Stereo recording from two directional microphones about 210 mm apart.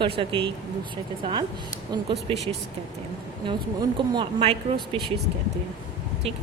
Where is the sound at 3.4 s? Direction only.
20° right (ahead or behind).